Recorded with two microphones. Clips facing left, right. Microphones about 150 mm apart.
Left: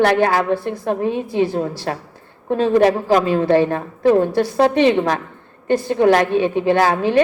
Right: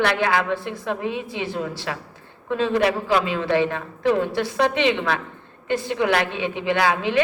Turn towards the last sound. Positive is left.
turn(degrees=45)  # may be behind; listen again after turning